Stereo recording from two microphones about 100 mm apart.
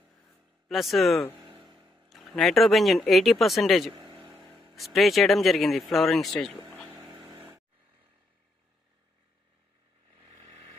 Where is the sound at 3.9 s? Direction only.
40° right (ahead or behind).